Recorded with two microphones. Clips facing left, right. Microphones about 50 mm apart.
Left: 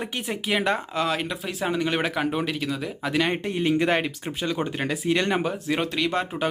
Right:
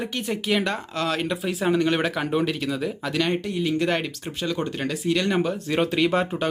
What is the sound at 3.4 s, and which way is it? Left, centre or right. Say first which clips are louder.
Speech: left 1 dB; left.